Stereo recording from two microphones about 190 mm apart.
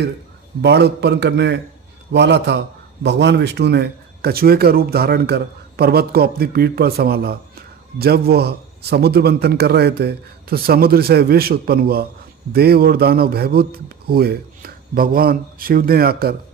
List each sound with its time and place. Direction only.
0.6 s a man's voice: 60° right (ahead or behind)